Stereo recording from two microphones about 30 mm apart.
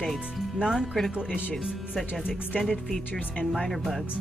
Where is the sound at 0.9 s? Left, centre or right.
Centre.